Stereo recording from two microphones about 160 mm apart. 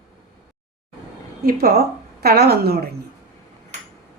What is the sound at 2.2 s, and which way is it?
Speech, 75° right (ahead or behind).